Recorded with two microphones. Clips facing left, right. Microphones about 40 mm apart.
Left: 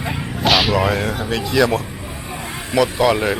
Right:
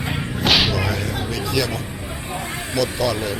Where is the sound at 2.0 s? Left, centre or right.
Centre.